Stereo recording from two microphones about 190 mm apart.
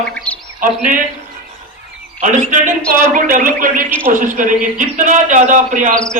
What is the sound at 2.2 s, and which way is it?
A man's voice, 40° right (ahead or behind).